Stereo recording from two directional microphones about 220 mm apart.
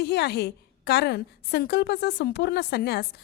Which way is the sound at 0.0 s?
50° left (ahead or behind).